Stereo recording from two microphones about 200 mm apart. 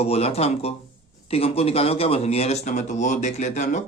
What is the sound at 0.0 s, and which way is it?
A man's voice, 30° left (ahead or behind).